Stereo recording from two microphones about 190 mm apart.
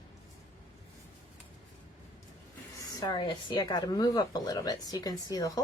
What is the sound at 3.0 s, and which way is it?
Speech, 25° left (ahead or behind).